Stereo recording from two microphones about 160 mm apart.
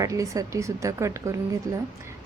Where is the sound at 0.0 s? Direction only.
20° right (ahead or behind).